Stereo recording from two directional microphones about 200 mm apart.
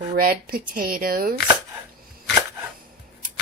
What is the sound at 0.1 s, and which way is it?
Speech, 50° right (ahead or behind).